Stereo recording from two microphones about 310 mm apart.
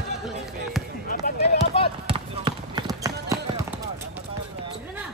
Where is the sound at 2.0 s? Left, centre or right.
Centre.